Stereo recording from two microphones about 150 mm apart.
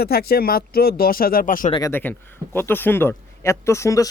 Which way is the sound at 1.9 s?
15° left (ahead or behind).